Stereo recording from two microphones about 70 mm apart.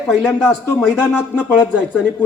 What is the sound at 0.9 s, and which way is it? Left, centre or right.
Speech, centre.